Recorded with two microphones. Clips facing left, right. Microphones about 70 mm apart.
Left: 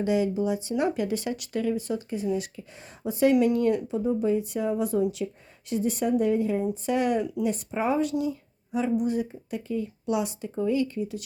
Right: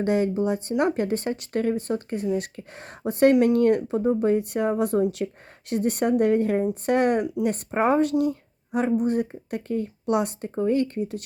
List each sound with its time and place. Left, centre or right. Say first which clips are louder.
0.0 s speech: right 2 dB; right
3.8 s speech: right 3 dB; right
8.2 s a sound: right 5 dB; right
9.0 s speech: right 3 dB; right